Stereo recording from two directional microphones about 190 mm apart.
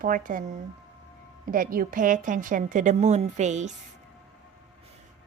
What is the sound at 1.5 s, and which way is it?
A woman's voice, 45° right (ahead or behind).